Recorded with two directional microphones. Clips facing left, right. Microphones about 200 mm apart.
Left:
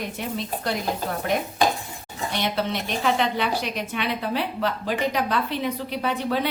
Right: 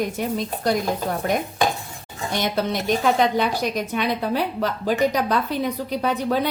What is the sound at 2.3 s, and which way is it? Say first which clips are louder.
A woman's voice: right 3 dB; 45° right (ahead or behind).